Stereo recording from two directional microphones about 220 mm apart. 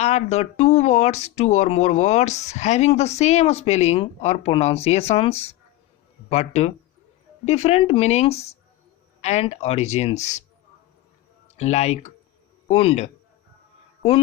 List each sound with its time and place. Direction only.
0.0 s speech: 30° left (ahead or behind)
11.5 s a man's voice: 30° left (ahead or behind)